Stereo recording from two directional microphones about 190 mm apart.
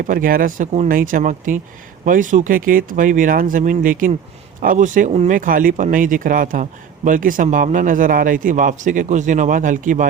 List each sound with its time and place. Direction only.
0.0 s speech: 45° right (ahead or behind)